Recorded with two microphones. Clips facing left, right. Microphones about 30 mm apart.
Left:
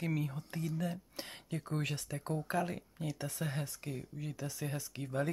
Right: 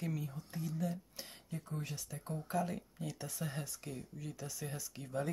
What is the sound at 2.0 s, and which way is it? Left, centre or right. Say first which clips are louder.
Speech: left 5 dB; left.